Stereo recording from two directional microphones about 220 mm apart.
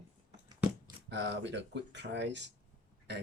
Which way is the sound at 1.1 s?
50° right (ahead or behind).